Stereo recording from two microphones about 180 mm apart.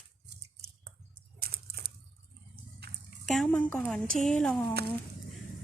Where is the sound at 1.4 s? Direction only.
55° right (ahead or behind).